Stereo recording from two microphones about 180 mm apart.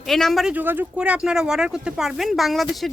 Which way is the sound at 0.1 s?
Centre (ahead or behind).